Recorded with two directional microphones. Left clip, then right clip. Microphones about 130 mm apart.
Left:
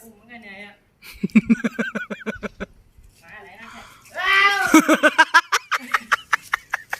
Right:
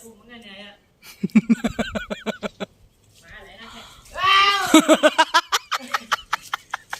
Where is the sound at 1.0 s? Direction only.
10° right (ahead or behind).